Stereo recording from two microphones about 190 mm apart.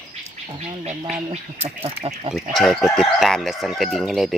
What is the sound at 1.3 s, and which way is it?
Speech, 35° right (ahead or behind).